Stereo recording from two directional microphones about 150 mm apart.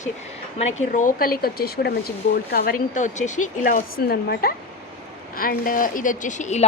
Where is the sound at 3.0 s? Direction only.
55° left (ahead or behind); by 4.5 s 90° left.